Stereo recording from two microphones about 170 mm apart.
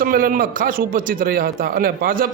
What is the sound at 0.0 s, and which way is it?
A man's voice, 55° right (ahead or behind).